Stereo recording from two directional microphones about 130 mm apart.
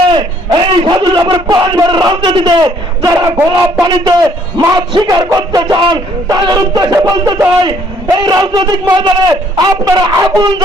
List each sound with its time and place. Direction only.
0.1 s a man's voice: 35° right (ahead or behind)